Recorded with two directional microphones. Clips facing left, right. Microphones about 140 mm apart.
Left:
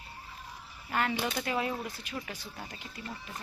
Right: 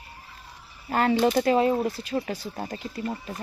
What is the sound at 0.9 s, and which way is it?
Speech, 35° right (ahead or behind).